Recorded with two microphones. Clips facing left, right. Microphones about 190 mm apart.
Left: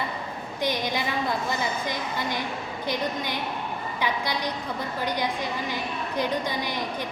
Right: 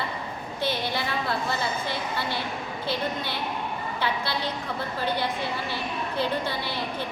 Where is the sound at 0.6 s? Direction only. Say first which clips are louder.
Left 1 dB; 15° left (ahead or behind).